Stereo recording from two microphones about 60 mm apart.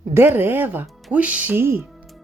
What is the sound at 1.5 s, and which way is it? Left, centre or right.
Speech, right.